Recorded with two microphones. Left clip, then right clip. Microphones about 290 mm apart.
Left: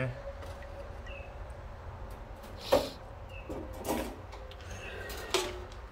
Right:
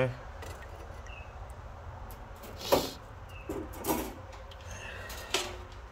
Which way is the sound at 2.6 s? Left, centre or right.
Centre.